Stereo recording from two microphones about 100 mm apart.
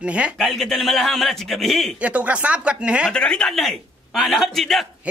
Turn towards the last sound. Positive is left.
turn(degrees=0)  # may be behind; listen again after turning